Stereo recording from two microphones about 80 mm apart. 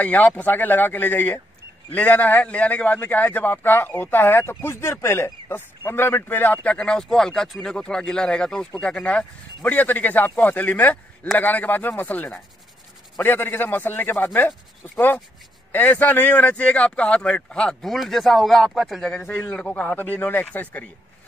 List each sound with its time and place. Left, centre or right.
0.0 s a man's voice: left
15.7 s speech: left
17.8 s a man's voice: centre
19.5 s a man's voice: centre